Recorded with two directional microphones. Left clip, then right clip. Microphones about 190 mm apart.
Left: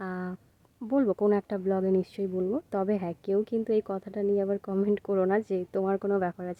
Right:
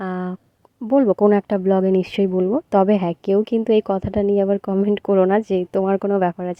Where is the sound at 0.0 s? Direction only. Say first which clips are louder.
Right 9 dB; 35° right (ahead or behind).